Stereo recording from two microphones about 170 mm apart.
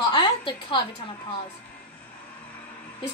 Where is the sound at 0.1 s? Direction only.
30° left (ahead or behind).